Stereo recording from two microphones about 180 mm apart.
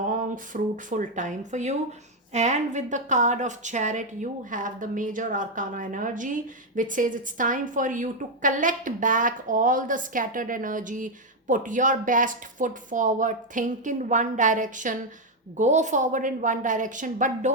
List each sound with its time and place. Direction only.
0.1 s a woman's voice: 50° right (ahead or behind)